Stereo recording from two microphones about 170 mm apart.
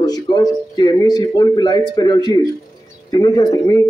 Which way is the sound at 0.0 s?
20° left (ahead or behind).